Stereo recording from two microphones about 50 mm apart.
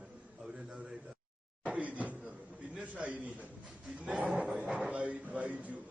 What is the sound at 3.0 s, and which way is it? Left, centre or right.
Speech, right.